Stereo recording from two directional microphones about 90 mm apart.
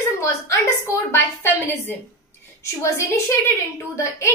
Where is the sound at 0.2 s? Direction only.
30° left (ahead or behind).